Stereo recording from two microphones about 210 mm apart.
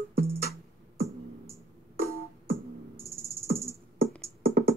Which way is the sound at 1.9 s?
45° right (ahead or behind).